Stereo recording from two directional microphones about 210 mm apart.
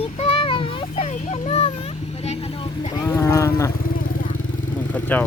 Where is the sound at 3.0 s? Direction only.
15° left (ahead or behind).